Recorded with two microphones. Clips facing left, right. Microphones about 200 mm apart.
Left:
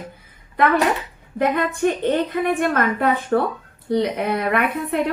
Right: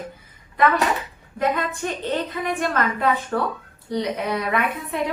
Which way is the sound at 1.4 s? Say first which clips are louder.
Left 5 dB; 55° left (ahead or behind).